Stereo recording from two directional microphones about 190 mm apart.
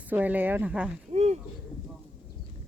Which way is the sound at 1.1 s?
35° right (ahead or behind).